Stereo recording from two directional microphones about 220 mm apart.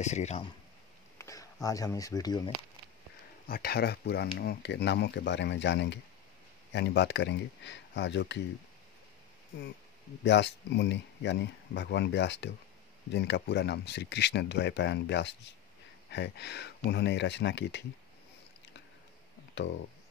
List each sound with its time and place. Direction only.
0.0 s speech: 30° left (ahead or behind)
1.1 s speech: 15° left (ahead or behind)
3.4 s speech: 45° left (ahead or behind)
10.2 s speech: 55° left (ahead or behind)
19.5 s speech: 55° left (ahead or behind)